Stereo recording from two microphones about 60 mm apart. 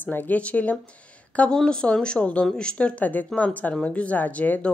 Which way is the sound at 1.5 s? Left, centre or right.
Centre.